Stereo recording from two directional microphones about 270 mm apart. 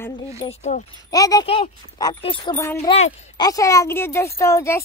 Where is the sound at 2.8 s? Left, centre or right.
Left.